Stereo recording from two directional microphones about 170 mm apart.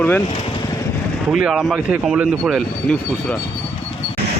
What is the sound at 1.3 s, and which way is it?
Speech, 5° right (ahead or behind).